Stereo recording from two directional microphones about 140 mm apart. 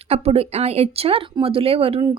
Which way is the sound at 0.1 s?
45° right (ahead or behind).